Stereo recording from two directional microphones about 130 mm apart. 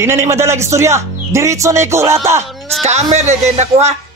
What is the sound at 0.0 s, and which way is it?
A man's voice, 20° right (ahead or behind).